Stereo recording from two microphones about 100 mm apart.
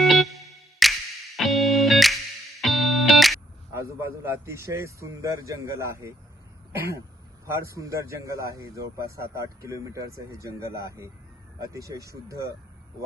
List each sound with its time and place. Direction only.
0.0 s music: centre (ahead or behind)
3.7 s a man's voice: 30° right (ahead or behind)
7.4 s a man's voice: 30° right (ahead or behind)